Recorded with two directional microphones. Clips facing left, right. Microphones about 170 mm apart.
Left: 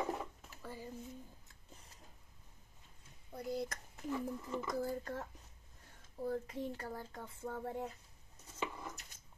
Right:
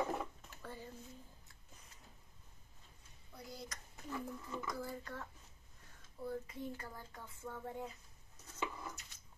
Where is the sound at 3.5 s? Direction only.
55° left (ahead or behind).